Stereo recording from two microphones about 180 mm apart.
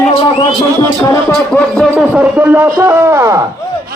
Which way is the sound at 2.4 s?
10° right (ahead or behind).